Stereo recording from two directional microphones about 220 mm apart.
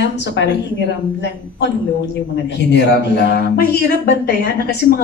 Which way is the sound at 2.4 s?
50° left (ahead or behind).